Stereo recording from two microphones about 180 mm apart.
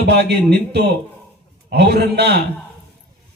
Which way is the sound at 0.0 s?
65° right (ahead or behind).